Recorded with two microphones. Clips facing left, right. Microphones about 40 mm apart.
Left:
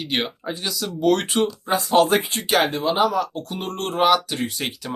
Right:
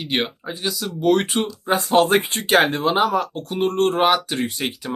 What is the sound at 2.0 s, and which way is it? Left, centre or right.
Speech, right.